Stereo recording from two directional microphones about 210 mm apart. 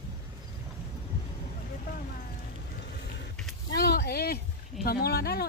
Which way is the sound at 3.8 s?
50° left (ahead or behind).